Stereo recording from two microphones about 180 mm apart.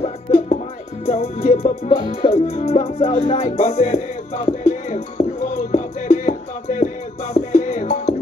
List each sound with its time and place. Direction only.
0.0 s music: 40° left (ahead or behind)